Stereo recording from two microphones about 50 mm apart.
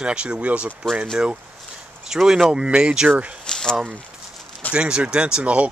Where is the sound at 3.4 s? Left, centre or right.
Centre.